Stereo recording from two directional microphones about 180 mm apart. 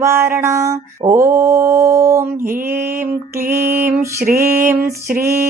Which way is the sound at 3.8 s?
15° right (ahead or behind).